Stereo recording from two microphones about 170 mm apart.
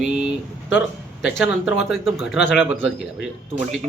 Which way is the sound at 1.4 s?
Centre (ahead or behind).